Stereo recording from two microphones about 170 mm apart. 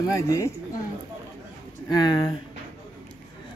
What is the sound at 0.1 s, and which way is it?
Speech, 20° left (ahead or behind).